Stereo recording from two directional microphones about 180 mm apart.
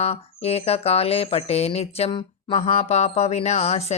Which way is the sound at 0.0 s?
35° left (ahead or behind).